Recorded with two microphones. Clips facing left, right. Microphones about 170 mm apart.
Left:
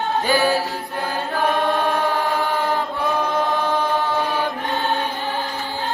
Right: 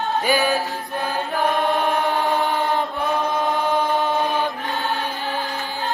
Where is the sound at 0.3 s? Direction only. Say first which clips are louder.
Left 1 dB; 15° right (ahead or behind).